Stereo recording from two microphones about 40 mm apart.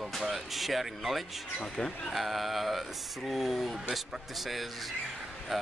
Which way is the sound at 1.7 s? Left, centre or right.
Centre.